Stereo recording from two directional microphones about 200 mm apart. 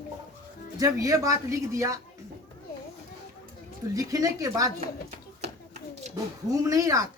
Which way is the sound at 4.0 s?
15° right (ahead or behind).